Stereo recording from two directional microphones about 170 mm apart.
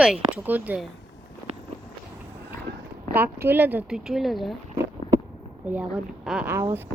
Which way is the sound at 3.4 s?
10° right (ahead or behind).